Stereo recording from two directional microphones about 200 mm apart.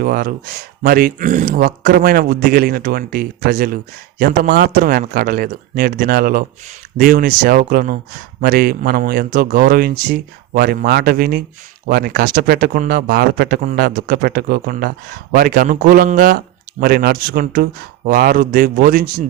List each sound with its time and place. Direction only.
0.0 s speech: 50° right (ahead or behind)